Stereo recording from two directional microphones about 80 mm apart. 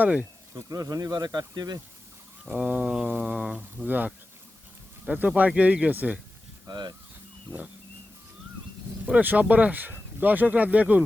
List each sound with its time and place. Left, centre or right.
0.0 s speech: centre
0.7 s speech: right
2.4 s speech: centre
6.7 s speech: right
9.0 s speech: centre